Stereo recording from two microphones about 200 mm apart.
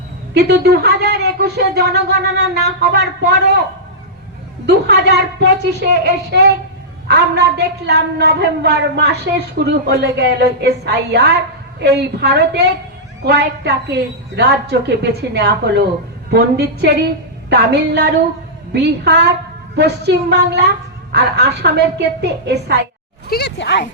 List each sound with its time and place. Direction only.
0.3 s speech: 55° right (ahead or behind)
4.6 s speech: 55° right (ahead or behind)
23.3 s speech: 55° left (ahead or behind)